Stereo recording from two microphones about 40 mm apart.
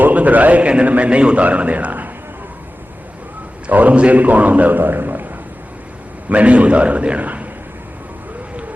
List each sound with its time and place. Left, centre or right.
0.0 s a man's voice: right
1.5 s a man's voice: right
3.7 s a man's voice: right
4.8 s a man's voice: right
6.2 s a man's voice: right